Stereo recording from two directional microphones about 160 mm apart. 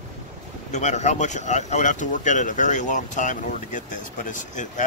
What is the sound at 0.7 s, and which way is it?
Speech, 45° left (ahead or behind).